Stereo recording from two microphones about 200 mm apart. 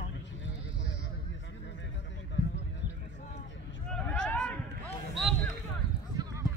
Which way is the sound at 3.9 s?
5° left (ahead or behind).